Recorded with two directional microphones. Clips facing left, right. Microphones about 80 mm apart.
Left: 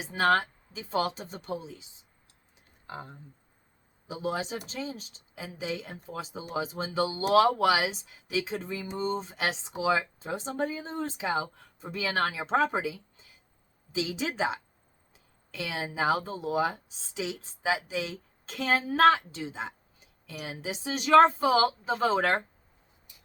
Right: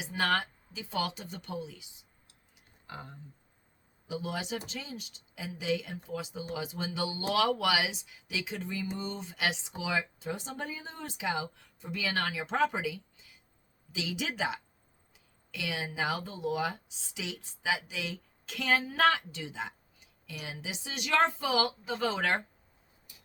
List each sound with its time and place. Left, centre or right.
0.0 s speech: left
4.1 s speech: left